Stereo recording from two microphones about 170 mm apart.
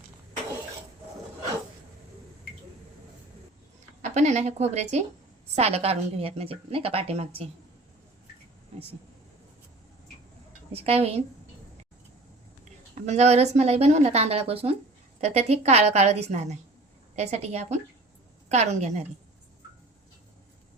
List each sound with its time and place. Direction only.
4.0 s a woman's voice: 45° right (ahead or behind)
10.7 s a woman's voice: 35° right (ahead or behind)
13.1 s a woman's voice: 40° right (ahead or behind)